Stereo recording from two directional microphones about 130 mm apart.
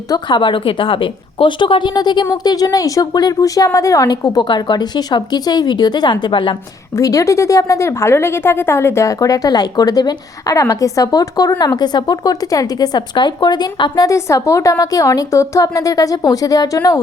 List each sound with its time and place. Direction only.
0.1 s speech: 35° left (ahead or behind)
6.9 s speech: 25° left (ahead or behind)